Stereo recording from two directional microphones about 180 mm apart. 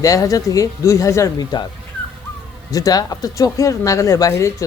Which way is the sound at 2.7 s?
20° left (ahead or behind).